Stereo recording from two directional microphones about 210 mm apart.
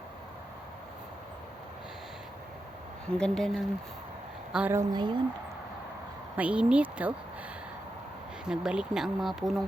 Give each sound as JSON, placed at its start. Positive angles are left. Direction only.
{"t": 3.1, "sound": "speech", "side_deg": 5}
{"t": 4.9, "sound": "speech", "side_deg": -20}
{"t": 6.3, "sound": "speech", "side_deg": -5}
{"t": 8.4, "sound": "speech", "side_deg": -5}